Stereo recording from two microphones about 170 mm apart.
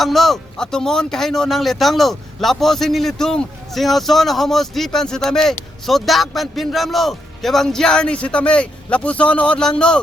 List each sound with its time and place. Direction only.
0.0 s speech: centre (ahead or behind)